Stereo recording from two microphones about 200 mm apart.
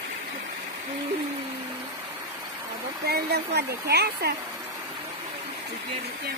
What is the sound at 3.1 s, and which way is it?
Speech, 50° right (ahead or behind).